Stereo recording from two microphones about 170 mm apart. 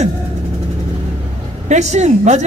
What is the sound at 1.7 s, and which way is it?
Speech, 40° right (ahead or behind).